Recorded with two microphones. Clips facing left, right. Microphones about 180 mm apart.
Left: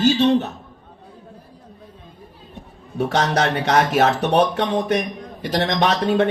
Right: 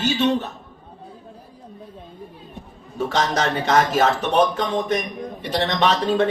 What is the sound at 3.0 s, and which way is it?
Speech, 70° left (ahead or behind).